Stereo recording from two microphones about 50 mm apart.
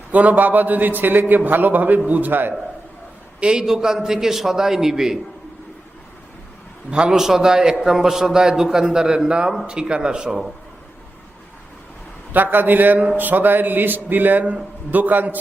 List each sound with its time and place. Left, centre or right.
0.1 s speech: right
3.4 s a man's voice: centre
6.9 s a man's voice: centre
12.3 s speech: right